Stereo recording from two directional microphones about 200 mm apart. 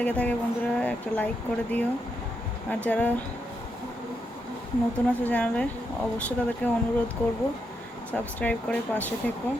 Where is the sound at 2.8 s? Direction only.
5° left (ahead or behind).